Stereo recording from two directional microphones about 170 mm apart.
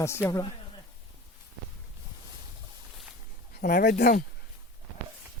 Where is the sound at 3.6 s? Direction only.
70° left (ahead or behind).